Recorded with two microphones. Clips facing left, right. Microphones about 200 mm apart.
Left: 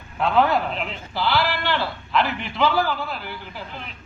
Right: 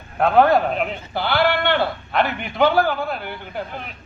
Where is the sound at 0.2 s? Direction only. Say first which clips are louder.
Right 5 dB; 55° right (ahead or behind).